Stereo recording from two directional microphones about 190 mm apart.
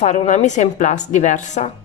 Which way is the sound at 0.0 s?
35° left (ahead or behind).